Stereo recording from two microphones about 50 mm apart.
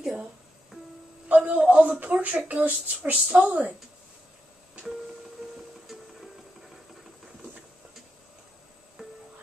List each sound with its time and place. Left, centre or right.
0.0 s music: centre
1.3 s a man's voice: right